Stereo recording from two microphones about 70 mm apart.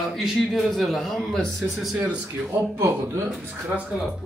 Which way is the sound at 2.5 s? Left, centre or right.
Right.